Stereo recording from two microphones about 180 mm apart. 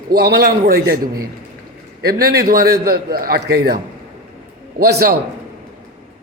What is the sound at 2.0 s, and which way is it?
A man's voice, 60° right (ahead or behind).